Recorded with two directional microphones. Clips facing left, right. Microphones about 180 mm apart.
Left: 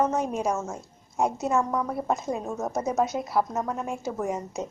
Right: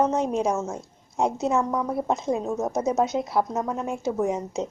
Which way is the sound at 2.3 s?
5° right (ahead or behind).